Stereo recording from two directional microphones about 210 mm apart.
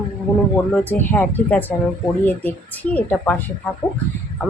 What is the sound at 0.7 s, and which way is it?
Speech, 10° left (ahead or behind).